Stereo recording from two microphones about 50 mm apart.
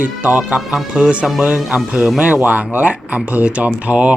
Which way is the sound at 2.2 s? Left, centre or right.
Right.